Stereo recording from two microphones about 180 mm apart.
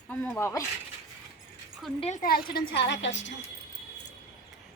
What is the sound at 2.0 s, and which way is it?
Speech, 40° left (ahead or behind).